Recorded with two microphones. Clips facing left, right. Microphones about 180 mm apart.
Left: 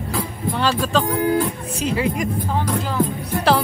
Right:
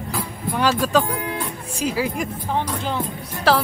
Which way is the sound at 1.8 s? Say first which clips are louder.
Left 2 dB; 5° right (ahead or behind).